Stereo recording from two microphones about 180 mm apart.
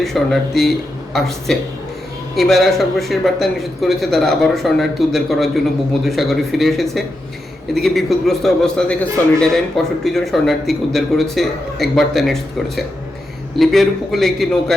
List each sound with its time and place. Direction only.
0.0 s speech: centre (ahead or behind)